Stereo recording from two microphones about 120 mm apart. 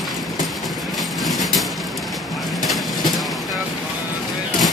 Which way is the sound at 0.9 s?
Centre (ahead or behind).